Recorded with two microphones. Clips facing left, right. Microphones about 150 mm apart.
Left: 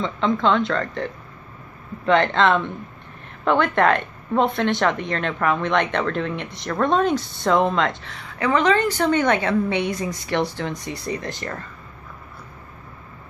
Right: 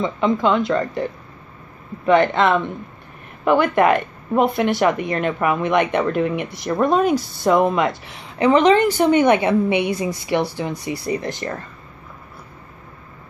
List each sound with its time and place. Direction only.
0.0 s a woman's voice: 10° right (ahead or behind)
2.0 s a woman's voice: 10° right (ahead or behind)
11.1 s speech: 25° right (ahead or behind)